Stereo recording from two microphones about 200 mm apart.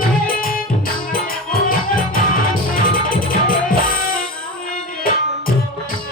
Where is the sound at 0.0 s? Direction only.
45° left (ahead or behind).